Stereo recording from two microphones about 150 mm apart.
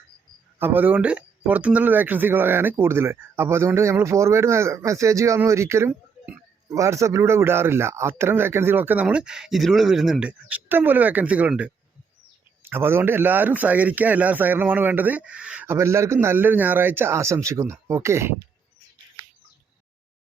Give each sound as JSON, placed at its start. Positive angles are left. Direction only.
{"t": 0.6, "sound": "speech", "side_deg": -10}